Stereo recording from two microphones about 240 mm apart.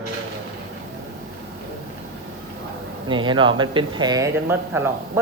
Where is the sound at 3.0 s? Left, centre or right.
Centre.